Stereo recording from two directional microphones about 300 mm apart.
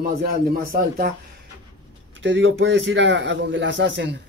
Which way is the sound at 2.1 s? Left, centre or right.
Right.